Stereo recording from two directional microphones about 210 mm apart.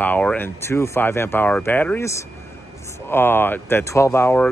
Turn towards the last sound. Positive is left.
turn(degrees=10)  # may be behind; listen again after turning